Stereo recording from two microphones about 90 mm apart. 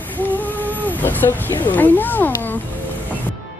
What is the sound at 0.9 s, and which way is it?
Speech, 20° left (ahead or behind).